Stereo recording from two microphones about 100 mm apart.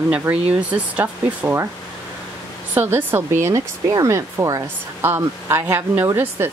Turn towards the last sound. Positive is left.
turn(degrees=-25)  # may be behind; listen again after turning